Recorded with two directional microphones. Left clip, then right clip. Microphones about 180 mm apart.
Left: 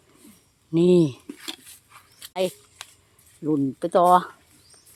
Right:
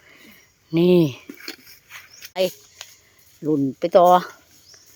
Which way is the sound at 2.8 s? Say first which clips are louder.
Right 2 dB; 40° left (ahead or behind).